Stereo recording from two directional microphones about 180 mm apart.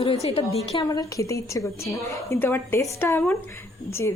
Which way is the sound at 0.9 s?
20° left (ahead or behind).